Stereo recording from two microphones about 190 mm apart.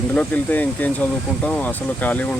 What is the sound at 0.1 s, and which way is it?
Speech, 5° left (ahead or behind).